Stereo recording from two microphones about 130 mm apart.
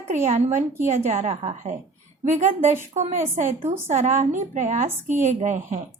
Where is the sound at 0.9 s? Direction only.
75° right (ahead or behind).